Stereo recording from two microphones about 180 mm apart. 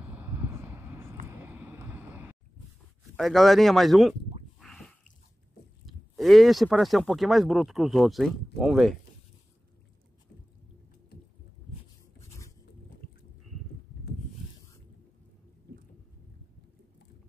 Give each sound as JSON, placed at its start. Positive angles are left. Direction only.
{"t": 0.0, "sound": "vehicle", "side_deg": -10}
{"t": 3.2, "sound": "speech", "side_deg": 0}
{"t": 4.6, "sound": "drip", "side_deg": 0}
{"t": 5.9, "sound": "speech", "side_deg": 0}
{"t": 12.2, "sound": "a sound", "side_deg": 15}